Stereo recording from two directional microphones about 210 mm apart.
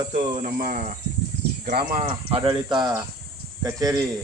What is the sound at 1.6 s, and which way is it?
Speech, 50° right (ahead or behind).